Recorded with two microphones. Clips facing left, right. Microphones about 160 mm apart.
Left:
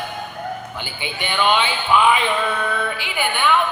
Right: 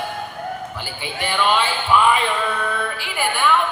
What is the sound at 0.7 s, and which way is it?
A man's voice, centre (ahead or behind).